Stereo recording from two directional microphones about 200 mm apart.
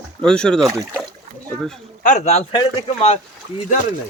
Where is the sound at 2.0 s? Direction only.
40° left (ahead or behind).